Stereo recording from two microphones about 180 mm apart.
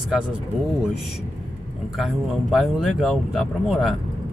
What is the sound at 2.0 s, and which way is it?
Speech, centre (ahead or behind).